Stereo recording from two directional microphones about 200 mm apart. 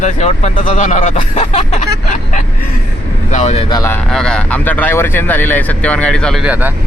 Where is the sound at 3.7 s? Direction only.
15° left (ahead or behind).